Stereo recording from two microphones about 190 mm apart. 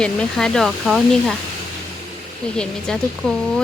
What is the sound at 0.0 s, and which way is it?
Speech, 5° left (ahead or behind).